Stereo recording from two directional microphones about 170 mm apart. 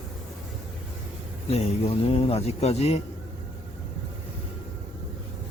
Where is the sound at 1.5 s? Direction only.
35° left (ahead or behind).